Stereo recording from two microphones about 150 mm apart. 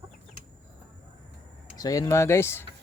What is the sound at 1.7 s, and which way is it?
Speech, 25° left (ahead or behind).